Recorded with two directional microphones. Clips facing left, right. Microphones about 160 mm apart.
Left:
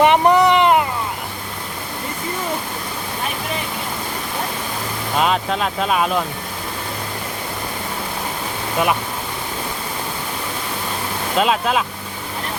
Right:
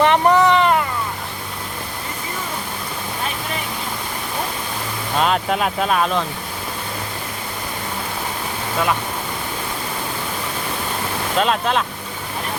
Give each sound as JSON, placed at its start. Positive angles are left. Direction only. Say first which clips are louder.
{"t": 0.0, "sound": "a sound", "louder": "left 1 dB", "side_deg": 15}
{"t": 5.1, "sound": "speech", "louder": "even", "side_deg": 0}
{"t": 11.3, "sound": "speech", "louder": "left 1 dB", "side_deg": 5}